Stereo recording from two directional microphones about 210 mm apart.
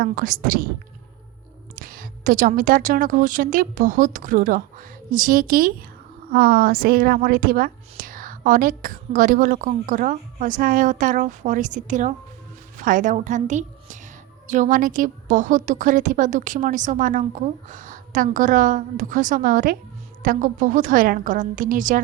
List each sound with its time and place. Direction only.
0.0 s a woman's voice: 40° right (ahead or behind)
1.7 s a woman's voice: 40° right (ahead or behind)